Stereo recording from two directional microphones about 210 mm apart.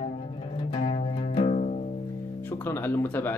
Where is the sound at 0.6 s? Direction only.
25° left (ahead or behind).